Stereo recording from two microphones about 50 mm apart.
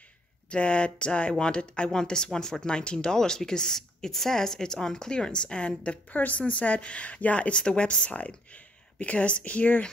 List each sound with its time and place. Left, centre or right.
0.5 s a woman's voice: left
6.1 s a woman's voice: left